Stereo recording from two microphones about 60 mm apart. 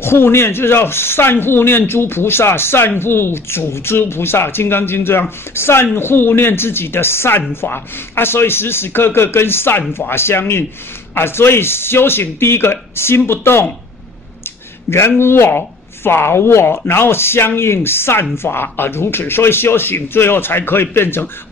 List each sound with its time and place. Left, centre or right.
0.0 s speech: left
14.9 s speech: left